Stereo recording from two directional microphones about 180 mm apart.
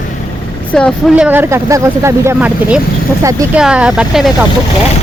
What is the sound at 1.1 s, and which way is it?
A woman's voice, 10° right (ahead or behind).